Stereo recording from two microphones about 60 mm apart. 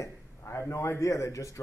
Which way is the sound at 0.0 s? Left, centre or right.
Left.